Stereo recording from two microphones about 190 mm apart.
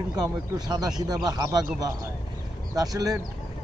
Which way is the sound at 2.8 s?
20° right (ahead or behind).